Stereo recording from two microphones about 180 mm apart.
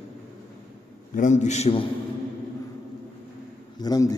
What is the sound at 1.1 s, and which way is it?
Speech, 40° left (ahead or behind).